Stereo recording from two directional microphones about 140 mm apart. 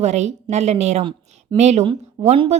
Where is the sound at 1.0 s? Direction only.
35° right (ahead or behind).